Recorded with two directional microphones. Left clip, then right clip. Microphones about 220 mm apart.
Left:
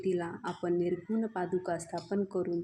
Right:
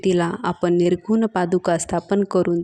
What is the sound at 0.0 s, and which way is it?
A woman's voice, 45° right (ahead or behind).